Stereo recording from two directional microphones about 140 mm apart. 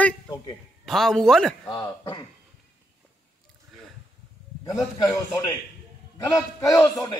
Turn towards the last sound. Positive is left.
turn(degrees=25)  # may be behind; listen again after turning